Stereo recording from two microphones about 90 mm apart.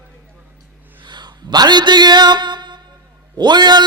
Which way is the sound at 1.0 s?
55° right (ahead or behind).